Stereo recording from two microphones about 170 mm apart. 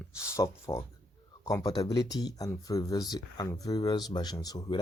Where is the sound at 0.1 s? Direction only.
15° left (ahead or behind).